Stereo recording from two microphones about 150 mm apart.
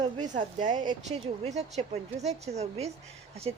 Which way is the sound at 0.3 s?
55° right (ahead or behind).